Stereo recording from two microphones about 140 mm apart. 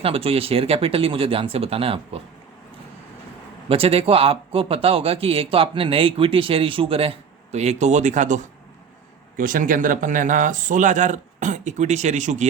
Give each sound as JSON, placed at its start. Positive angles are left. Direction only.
{"t": 0.0, "sound": "speech", "side_deg": -40}
{"t": 3.7, "sound": "speech", "side_deg": -45}
{"t": 9.4, "sound": "speech", "side_deg": -80}